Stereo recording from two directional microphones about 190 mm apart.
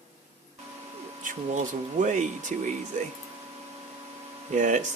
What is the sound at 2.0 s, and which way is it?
Speech, 40° right (ahead or behind).